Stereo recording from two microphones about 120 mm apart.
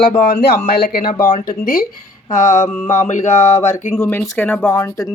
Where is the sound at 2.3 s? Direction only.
90° left.